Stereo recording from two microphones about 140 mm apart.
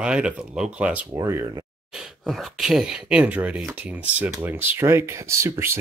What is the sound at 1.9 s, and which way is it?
Speech, centre (ahead or behind).